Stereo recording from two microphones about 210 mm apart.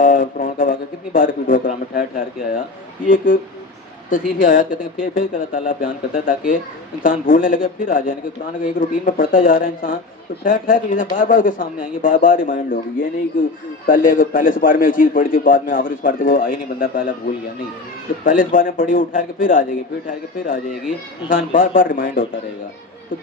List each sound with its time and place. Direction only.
0.0 s a man's voice: 40° left (ahead or behind)
4.1 s a man's voice: 40° left (ahead or behind)
18.3 s a man's voice: 40° left (ahead or behind)